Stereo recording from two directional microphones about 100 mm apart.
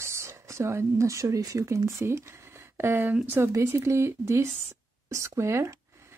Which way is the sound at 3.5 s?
30° right (ahead or behind).